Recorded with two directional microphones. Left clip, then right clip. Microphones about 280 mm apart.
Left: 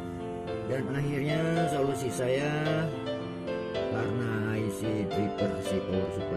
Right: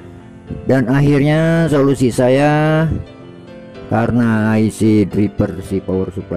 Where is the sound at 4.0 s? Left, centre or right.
Right.